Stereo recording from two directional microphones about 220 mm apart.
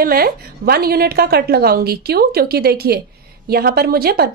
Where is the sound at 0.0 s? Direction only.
45° right (ahead or behind).